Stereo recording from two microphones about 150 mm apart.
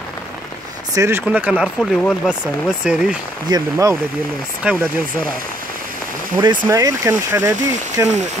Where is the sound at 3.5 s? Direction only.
25° right (ahead or behind).